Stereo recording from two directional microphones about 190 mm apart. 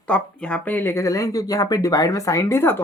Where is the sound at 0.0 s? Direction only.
5° left (ahead or behind).